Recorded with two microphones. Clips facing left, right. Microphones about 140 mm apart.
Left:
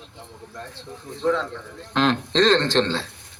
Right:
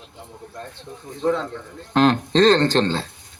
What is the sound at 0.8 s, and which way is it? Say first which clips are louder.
Speech: right 2 dB; 45° right (ahead or behind).